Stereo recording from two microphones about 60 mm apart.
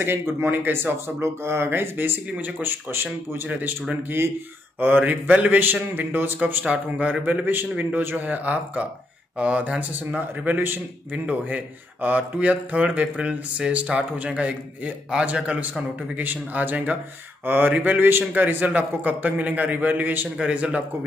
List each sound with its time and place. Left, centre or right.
0.0 s a man's voice: right
2.9 s speech: right
4.7 s a man's voice: right
6.6 s a man's voice: centre